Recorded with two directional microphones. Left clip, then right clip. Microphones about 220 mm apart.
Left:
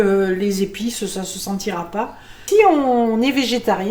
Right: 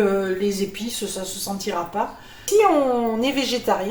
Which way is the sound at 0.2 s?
50° left (ahead or behind).